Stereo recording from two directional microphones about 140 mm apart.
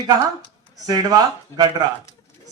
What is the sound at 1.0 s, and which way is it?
Speech, 30° right (ahead or behind).